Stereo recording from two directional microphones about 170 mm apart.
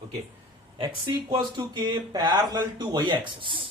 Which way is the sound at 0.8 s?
25° right (ahead or behind).